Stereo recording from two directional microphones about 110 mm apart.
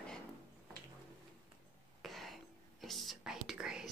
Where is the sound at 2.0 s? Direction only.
Centre (ahead or behind).